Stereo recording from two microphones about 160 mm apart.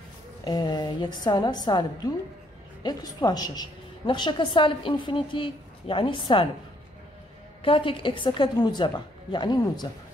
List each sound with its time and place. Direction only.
0.4 s a woman's voice: 25° left (ahead or behind)
7.6 s a woman's voice: 35° left (ahead or behind)